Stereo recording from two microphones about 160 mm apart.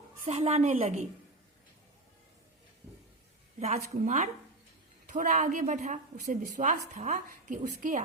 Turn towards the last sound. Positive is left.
turn(degrees=-50)  # may be behind; listen again after turning